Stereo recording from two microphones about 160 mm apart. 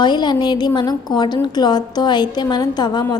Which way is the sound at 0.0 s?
25° left (ahead or behind).